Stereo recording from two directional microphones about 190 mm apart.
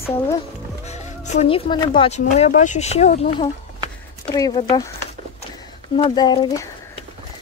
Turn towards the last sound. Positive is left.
turn(degrees=20)  # may be behind; listen again after turning